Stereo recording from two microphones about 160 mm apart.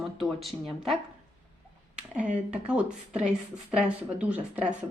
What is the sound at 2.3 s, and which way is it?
A woman's voice, 5° right (ahead or behind).